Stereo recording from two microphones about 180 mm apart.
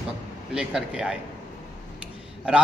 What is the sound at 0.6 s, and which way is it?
Speech, 5° right (ahead or behind).